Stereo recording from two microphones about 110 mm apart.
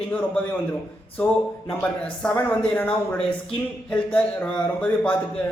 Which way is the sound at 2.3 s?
15° left (ahead or behind).